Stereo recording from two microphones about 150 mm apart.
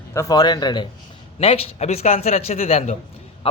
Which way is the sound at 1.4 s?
40° left (ahead or behind).